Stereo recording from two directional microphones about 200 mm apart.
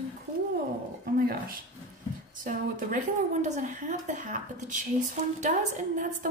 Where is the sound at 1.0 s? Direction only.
45° right (ahead or behind).